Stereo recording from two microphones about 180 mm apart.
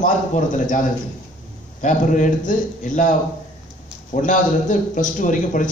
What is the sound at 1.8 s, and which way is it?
A man's voice, 45° left (ahead or behind).